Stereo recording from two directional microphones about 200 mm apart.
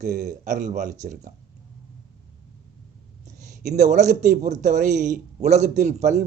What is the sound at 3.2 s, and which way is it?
A man's voice, 35° right (ahead or behind).